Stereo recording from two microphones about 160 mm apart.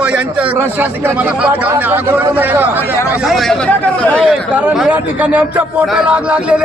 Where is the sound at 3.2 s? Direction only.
Centre (ahead or behind).